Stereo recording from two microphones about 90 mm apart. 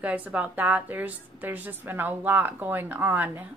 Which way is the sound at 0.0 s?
15° right (ahead or behind).